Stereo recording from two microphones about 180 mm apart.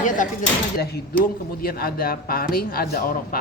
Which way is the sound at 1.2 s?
55° left (ahead or behind).